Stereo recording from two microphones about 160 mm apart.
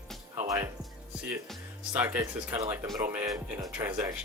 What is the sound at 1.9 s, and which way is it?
Speech, 10° right (ahead or behind).